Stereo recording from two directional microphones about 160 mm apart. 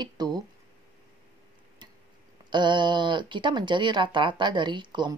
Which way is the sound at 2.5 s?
30° right (ahead or behind).